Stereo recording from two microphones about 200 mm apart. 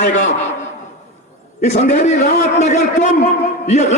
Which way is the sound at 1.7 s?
35° left (ahead or behind).